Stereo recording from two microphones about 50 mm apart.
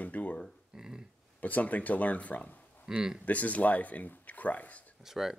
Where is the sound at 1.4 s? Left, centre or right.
Left.